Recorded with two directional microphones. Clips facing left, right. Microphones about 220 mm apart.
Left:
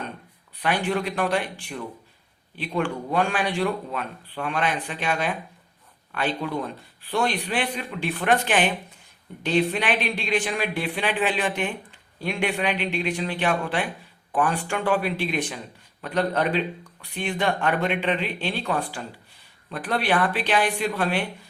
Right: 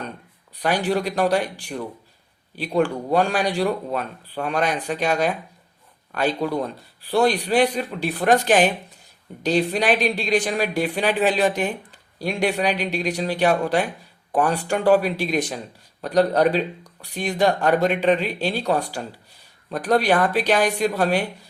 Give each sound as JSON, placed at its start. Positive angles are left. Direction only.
{"t": 0.5, "sound": "speech", "side_deg": -40}